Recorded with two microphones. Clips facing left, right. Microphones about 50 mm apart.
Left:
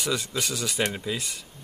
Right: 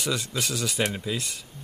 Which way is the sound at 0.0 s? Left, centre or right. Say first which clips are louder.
Even; centre.